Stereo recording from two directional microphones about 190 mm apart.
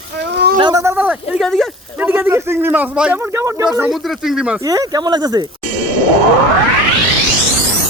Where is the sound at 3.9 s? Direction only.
Centre (ahead or behind).